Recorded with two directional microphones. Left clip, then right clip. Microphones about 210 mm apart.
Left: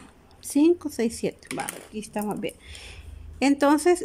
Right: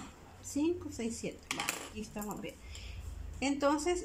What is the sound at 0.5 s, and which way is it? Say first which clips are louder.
Speech: left 13 dB; 55° left (ahead or behind).